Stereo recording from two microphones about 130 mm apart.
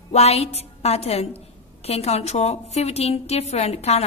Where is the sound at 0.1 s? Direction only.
55° left (ahead or behind).